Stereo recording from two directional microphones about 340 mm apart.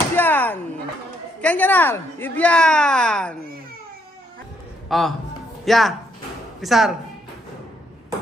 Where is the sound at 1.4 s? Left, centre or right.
Centre.